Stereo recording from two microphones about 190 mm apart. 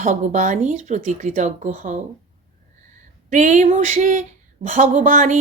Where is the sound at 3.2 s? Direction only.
40° right (ahead or behind).